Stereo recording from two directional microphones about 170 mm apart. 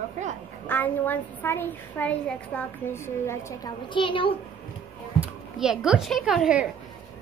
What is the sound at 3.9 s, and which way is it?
Speech, 30° left (ahead or behind).